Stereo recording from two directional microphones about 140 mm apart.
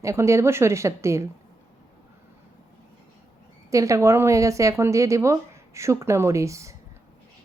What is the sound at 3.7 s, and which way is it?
Speech, 20° right (ahead or behind).